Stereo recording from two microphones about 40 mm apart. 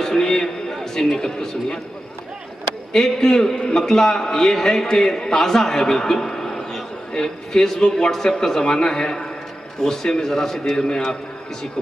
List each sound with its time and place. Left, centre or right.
0.0 s a man's voice: centre
2.9 s a man's voice: centre